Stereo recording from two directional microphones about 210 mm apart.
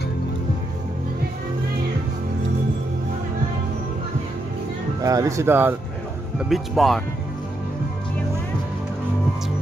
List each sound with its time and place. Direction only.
5.0 s speech: 15° right (ahead or behind)
6.5 s speech: centre (ahead or behind)